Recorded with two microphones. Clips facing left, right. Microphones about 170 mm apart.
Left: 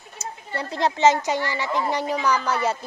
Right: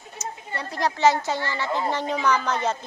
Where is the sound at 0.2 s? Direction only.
30° left (ahead or behind).